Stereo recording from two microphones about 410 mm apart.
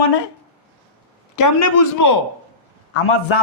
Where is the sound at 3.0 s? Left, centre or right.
Left.